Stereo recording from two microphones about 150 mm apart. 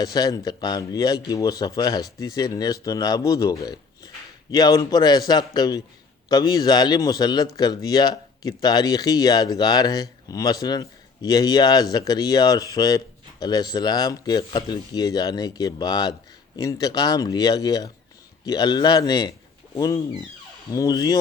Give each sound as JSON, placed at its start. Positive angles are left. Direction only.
{"t": 0.0, "sound": "speech", "side_deg": 25}